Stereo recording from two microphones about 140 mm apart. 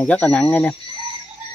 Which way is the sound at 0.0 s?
10° left (ahead or behind).